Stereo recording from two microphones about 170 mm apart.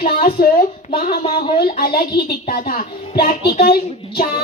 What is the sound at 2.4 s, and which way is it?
Speech, 60° left (ahead or behind).